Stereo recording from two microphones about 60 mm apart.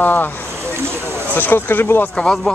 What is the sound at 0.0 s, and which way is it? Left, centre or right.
Speech, left.